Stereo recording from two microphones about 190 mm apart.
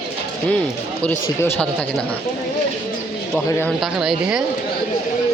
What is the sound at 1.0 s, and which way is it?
Speech, 10° left (ahead or behind).